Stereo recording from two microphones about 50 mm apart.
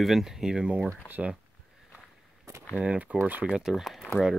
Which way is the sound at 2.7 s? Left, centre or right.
Right.